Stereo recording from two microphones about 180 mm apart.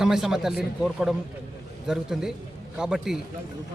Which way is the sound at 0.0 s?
5° right (ahead or behind).